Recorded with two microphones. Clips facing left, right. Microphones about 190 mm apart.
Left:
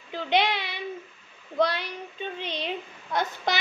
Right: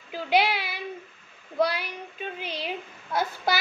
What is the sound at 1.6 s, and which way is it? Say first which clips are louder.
A child's voice: even; 5° right (ahead or behind).